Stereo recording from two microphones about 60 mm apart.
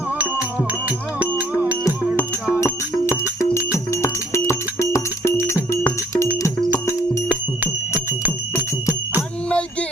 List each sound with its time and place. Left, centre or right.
0.9 s music: right
3.7 s music: left
7.3 s music: right